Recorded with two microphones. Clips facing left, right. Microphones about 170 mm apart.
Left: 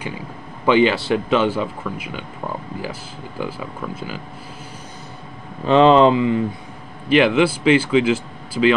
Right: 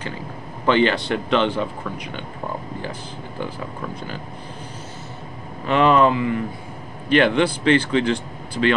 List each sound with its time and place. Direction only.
0.7 s speech: 10° left (ahead or behind)
5.7 s speech: 25° left (ahead or behind)
7.1 s speech: 5° left (ahead or behind)